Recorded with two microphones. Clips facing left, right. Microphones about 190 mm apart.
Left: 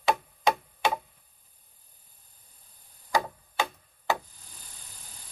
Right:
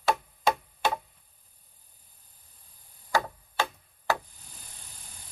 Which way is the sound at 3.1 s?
15° left (ahead or behind).